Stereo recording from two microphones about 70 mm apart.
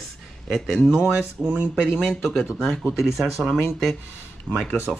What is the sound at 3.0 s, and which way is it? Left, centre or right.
Speech, centre.